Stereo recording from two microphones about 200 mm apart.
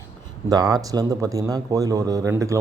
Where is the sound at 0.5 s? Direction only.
20° right (ahead or behind).